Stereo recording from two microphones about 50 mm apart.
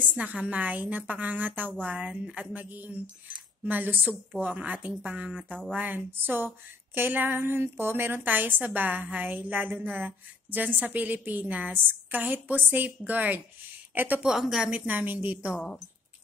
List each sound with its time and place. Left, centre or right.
0.0 s a woman's voice: right
5.9 s a woman's voice: right